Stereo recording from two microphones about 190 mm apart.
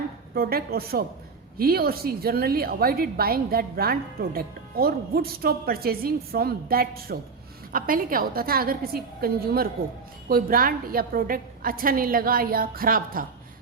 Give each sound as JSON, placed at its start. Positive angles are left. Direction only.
{"t": 0.3, "sound": "a woman's voice", "side_deg": -55}